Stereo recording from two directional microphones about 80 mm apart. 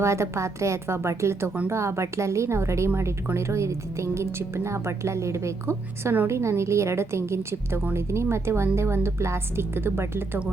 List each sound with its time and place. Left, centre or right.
0.0 s a woman's voice: right